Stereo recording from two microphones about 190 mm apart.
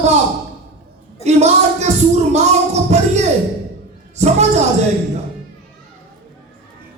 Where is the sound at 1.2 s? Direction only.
35° right (ahead or behind).